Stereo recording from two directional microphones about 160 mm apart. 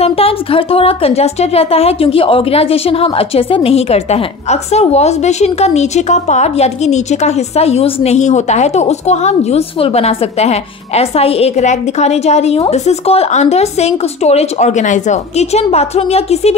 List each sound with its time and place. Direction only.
0.0 s speech: 35° left (ahead or behind)